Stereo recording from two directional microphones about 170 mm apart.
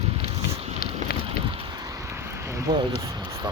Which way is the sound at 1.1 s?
65° left (ahead or behind).